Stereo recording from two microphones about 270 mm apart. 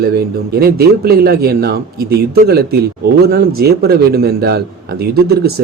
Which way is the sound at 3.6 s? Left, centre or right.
Right.